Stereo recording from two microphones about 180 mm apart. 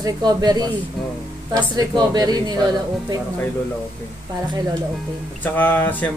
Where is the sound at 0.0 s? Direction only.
20° right (ahead or behind).